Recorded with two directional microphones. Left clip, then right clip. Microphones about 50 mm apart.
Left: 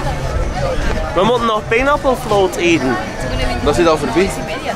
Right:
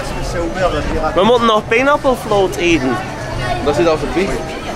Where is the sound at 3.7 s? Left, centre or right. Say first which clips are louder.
Left 1 dB; left.